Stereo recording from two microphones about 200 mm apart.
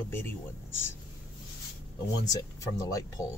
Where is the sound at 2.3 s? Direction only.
15° left (ahead or behind).